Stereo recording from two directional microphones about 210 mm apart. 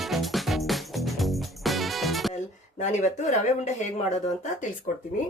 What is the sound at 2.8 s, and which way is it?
Speech, 35° left (ahead or behind).